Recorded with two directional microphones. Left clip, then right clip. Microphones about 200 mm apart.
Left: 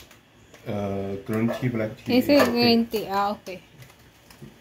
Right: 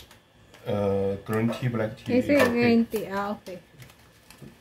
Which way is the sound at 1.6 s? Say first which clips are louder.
Left 2 dB; 35° right (ahead or behind).